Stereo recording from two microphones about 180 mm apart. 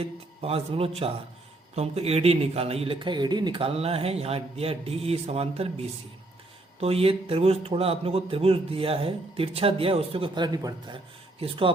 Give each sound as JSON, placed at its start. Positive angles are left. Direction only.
{"t": 0.0, "sound": "speech", "side_deg": -35}